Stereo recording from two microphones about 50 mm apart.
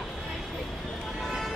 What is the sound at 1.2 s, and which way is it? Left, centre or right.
Vehicle, centre.